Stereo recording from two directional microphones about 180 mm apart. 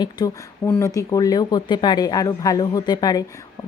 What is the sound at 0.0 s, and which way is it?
A woman's voice, 20° left (ahead or behind).